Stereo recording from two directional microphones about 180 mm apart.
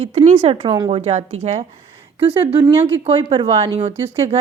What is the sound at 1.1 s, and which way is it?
Speech, 40° right (ahead or behind).